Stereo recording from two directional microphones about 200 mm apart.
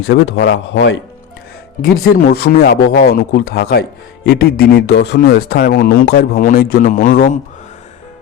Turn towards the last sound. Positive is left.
turn(degrees=45)  # may be behind; listen again after turning